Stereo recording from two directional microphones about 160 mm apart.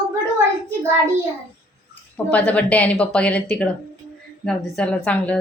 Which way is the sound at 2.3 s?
10° left (ahead or behind).